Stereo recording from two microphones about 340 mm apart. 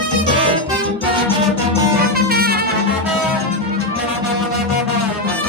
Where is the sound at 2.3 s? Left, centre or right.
Right.